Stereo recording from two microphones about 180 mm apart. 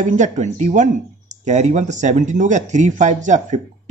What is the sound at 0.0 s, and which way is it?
Speech, 45° right (ahead or behind).